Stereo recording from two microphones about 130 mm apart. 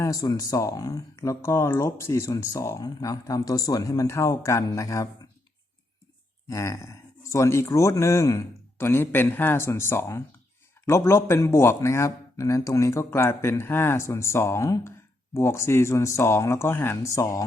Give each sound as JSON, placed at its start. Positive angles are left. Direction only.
{"t": 0.0, "sound": "speech", "side_deg": 30}
{"t": 6.5, "sound": "speech", "side_deg": 20}